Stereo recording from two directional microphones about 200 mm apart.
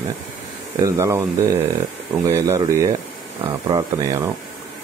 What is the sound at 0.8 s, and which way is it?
Speech, 15° right (ahead or behind).